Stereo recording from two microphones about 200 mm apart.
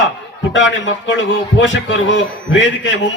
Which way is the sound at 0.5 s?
65° left (ahead or behind).